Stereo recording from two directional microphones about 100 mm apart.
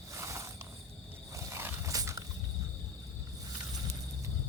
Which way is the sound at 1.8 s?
30° right (ahead or behind).